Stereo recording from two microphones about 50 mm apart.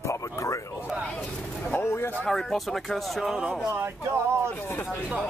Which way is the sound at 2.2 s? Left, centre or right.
Centre.